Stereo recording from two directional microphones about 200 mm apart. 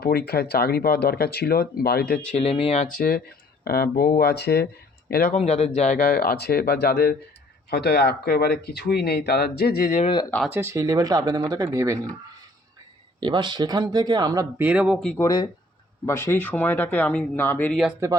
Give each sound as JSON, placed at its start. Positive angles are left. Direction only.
{"t": 0.0, "sound": "speech", "side_deg": 50}
{"t": 2.3, "sound": "speech", "side_deg": 30}
{"t": 2.8, "sound": "speech", "side_deg": 45}
{"t": 5.3, "sound": "speech", "side_deg": 30}
{"t": 10.5, "sound": "speech", "side_deg": -15}
{"t": 13.1, "sound": "speech", "side_deg": -25}
{"t": 14.6, "sound": "speech", "side_deg": -5}
{"t": 15.1, "sound": "speech", "side_deg": 15}